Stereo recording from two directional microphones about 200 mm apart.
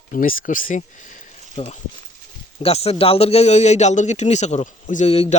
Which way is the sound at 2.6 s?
30° left (ahead or behind).